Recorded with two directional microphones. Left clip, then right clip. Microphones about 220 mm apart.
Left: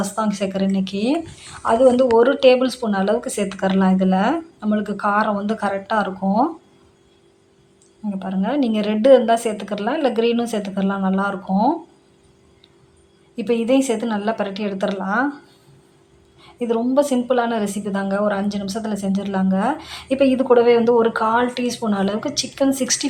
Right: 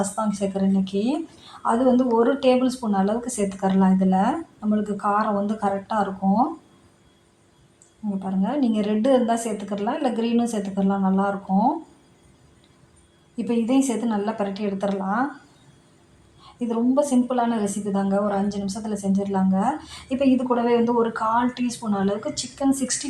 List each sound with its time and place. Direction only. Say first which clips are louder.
0.0 s a woman's voice: left 3 dB; 20° left (ahead or behind)
8.2 s a woman's voice: left 4 dB; 25° left (ahead or behind)
13.3 s a woman's voice: left 5 dB; 25° left (ahead or behind)
16.4 s a woman's voice: left 4 dB; 25° left (ahead or behind)